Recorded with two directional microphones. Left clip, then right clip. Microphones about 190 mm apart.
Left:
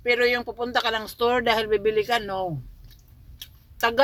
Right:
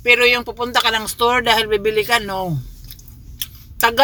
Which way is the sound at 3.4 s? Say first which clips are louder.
Right 8 dB; 20° right (ahead or behind).